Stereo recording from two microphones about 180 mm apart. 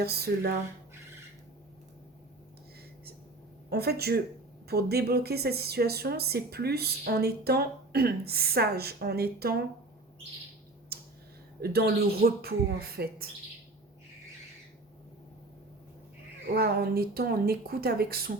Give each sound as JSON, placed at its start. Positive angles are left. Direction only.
{"t": 0.0, "sound": "speech", "side_deg": -60}
{"t": 3.7, "sound": "speech", "side_deg": -60}
{"t": 10.9, "sound": "computer keyboard", "side_deg": -60}
{"t": 11.6, "sound": "speech", "side_deg": -60}
{"t": 16.6, "sound": "speech", "side_deg": -60}